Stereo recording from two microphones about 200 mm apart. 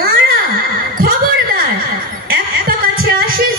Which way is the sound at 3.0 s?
45° right (ahead or behind).